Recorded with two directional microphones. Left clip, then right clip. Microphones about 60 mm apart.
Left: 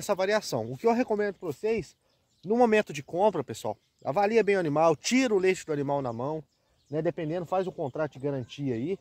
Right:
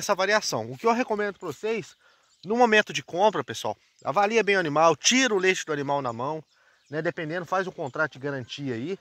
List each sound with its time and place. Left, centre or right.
0.0 s speech: centre; by 2.7 s left
2.7 s speech: centre
4.0 s speech: left
4.6 s speech: centre
6.9 s speech: left